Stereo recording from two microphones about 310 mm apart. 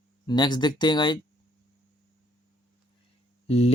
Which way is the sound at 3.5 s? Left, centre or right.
Centre.